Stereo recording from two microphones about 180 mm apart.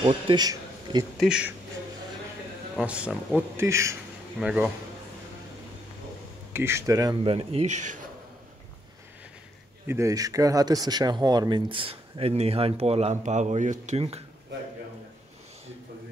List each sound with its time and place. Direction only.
0.0 s a man's voice: 25° right (ahead or behind)
1.2 s speech: 5° right (ahead or behind)
2.7 s a man's voice: 5° right (ahead or behind)
4.4 s speech: 5° right (ahead or behind)
6.5 s a man's voice: 15° right (ahead or behind)
7.2 s speech: 35° right (ahead or behind)
9.8 s speech: 15° right (ahead or behind); by 14.2 s 35° right (ahead or behind)